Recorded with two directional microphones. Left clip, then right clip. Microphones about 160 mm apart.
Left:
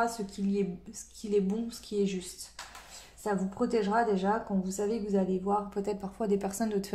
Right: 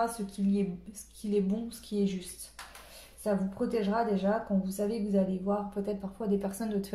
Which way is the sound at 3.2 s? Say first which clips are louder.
Even; 35° left (ahead or behind).